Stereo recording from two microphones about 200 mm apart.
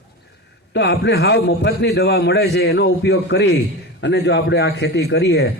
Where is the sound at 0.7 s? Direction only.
60° left (ahead or behind).